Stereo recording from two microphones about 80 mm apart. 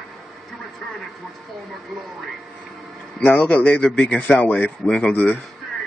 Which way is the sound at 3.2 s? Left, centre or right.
Centre.